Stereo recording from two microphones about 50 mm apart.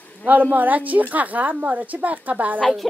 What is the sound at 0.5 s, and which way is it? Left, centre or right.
A woman's voice, right.